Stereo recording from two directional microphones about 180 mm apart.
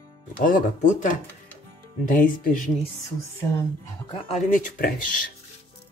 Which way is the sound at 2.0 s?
50° left (ahead or behind).